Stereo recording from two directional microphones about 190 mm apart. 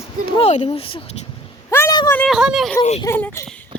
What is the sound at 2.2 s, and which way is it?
Speech, centre (ahead or behind).